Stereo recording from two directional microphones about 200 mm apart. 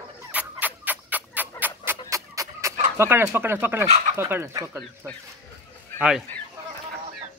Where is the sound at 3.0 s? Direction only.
10° right (ahead or behind).